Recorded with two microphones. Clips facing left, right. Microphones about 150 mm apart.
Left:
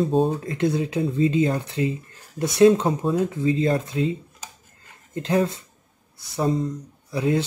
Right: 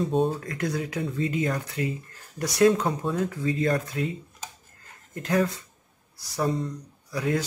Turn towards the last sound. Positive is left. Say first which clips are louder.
# left 4 dB
turn(degrees=25)  # may be behind; listen again after turning